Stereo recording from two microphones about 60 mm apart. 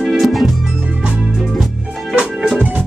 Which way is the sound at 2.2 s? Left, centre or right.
Centre.